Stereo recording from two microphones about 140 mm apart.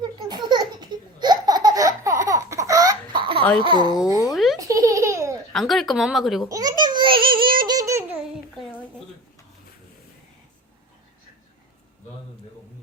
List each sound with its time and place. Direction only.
0.4 s baby laughter: 30° right (ahead or behind)
3.6 s a child's voice: 30° right (ahead or behind)
4.3 s a sound: centre (ahead or behind)
4.6 s baby laughter: 25° right (ahead or behind)
5.5 s speech: centre (ahead or behind)
6.5 s a sound: 30° right (ahead or behind)
7.6 s baby laughter: 25° right (ahead or behind)